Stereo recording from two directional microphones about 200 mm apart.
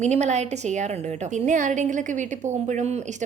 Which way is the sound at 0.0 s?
35° right (ahead or behind).